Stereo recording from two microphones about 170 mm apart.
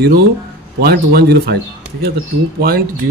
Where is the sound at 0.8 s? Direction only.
65° right (ahead or behind).